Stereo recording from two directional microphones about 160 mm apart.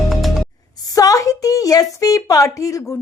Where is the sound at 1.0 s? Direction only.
20° left (ahead or behind).